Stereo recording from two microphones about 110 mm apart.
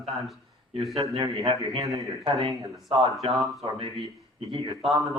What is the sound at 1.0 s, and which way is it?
Speech, 70° right (ahead or behind).